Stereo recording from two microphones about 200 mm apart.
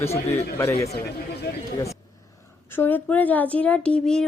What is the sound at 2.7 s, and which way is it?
Speech, 10° left (ahead or behind).